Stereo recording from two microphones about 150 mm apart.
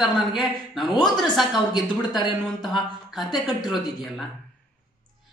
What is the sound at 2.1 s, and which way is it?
Speech, 30° left (ahead or behind).